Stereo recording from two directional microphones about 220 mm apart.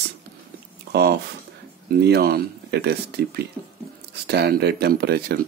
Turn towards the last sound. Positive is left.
turn(degrees=-45)  # may be behind; listen again after turning